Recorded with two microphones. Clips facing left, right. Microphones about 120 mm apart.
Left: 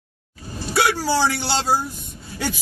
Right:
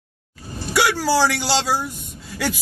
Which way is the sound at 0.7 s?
85° right.